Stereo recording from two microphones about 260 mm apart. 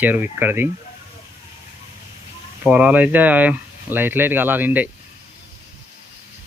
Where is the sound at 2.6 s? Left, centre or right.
Centre.